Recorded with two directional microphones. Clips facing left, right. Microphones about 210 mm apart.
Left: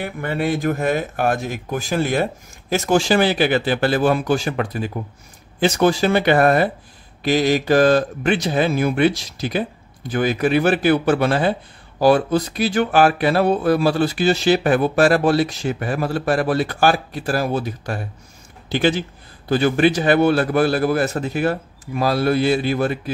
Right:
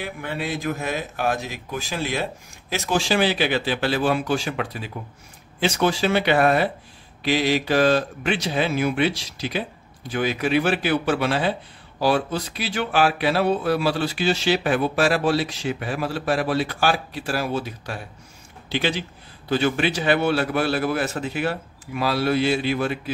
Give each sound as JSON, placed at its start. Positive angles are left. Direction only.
{"t": 0.0, "sound": "speech", "side_deg": 55}